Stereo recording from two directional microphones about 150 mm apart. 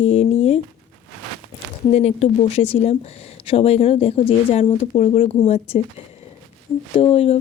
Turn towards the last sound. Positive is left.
turn(degrees=40)  # may be behind; listen again after turning